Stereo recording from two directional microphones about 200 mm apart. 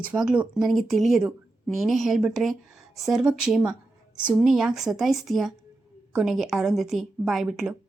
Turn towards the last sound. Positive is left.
turn(degrees=-5)  # may be behind; listen again after turning